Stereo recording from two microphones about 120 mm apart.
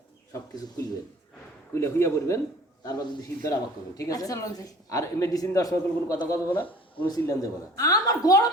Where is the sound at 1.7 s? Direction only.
20° left (ahead or behind).